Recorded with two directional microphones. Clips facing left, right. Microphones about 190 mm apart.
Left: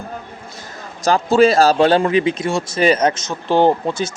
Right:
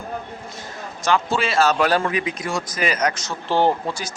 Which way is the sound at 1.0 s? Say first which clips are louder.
Left 8 dB; 40° left (ahead or behind).